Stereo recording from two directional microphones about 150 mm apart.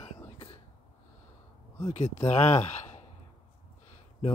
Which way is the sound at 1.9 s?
50° left (ahead or behind).